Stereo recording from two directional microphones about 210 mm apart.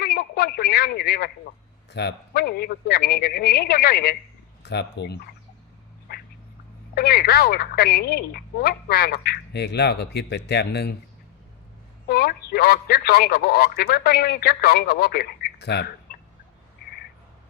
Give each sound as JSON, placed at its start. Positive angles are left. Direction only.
{"t": 0.0, "sound": "a sound", "side_deg": 45}
{"t": 1.9, "sound": "speech", "side_deg": 55}
{"t": 6.1, "sound": "duck", "side_deg": 45}
{"t": 6.9, "sound": "speech", "side_deg": 45}
{"t": 12.0, "sound": "speech", "side_deg": 45}
{"t": 16.1, "sound": "fowl", "side_deg": 50}